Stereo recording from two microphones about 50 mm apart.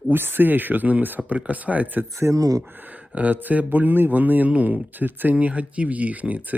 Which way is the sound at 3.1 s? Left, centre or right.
Right.